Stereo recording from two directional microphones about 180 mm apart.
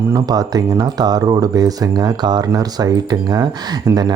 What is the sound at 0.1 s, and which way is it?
Speech, 20° right (ahead or behind).